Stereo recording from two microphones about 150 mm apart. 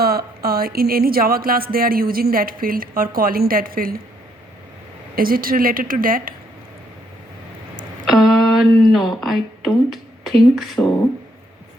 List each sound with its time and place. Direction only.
0.0 s speech: 90° right; by 3.9 s 75° right (ahead or behind)
5.1 s speech: 75° right (ahead or behind)
8.0 s speech: centre (ahead or behind)